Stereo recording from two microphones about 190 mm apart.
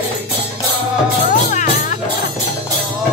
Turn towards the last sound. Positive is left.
turn(degrees=40)  # may be behind; listen again after turning